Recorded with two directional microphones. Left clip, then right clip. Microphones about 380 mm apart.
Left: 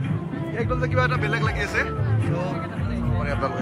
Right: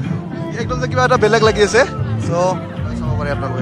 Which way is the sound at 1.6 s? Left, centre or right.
Centre.